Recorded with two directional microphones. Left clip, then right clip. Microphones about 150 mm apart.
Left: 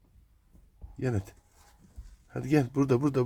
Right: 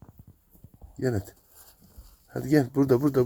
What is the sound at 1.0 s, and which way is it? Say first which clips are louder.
Speech: right 5 dB; centre (ahead or behind).